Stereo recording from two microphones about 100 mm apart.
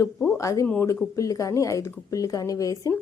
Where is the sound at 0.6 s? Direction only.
20° left (ahead or behind).